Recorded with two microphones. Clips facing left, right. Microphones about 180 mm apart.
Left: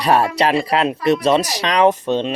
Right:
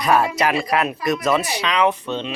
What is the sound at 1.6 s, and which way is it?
Speech, 40° left (ahead or behind).